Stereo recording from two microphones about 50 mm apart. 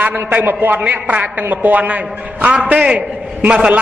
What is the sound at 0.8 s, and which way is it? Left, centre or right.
A man's voice, right.